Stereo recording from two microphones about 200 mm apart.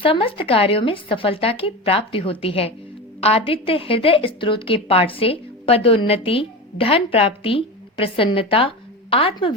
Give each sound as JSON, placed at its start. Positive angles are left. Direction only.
{"t": 0.0, "sound": "a woman's voice", "side_deg": 25}